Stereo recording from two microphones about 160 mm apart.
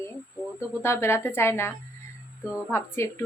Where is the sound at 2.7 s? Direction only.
15° left (ahead or behind).